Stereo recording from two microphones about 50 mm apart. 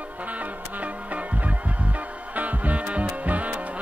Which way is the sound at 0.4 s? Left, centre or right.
Right.